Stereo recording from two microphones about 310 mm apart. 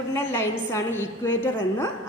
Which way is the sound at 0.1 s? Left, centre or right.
Centre.